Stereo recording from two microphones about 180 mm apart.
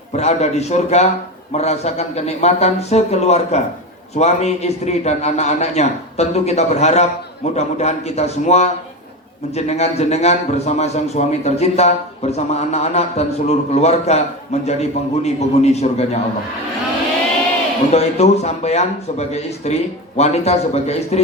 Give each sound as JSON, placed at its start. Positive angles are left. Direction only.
{"t": 0.2, "sound": "a man's voice", "side_deg": 35}
{"t": 17.9, "sound": "a man's voice", "side_deg": 35}